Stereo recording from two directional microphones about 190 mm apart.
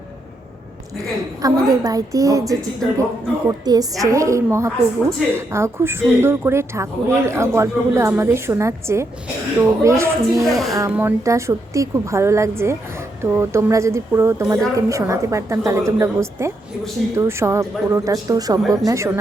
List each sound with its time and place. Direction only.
1.4 s a woman's voice: 20° right (ahead or behind)
3.7 s a woman's voice: 20° right (ahead or behind)
10.4 s speech: centre (ahead or behind)
10.8 s a woman's voice: 15° right (ahead or behind)